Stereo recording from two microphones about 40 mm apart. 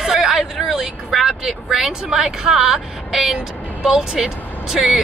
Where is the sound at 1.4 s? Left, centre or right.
Centre.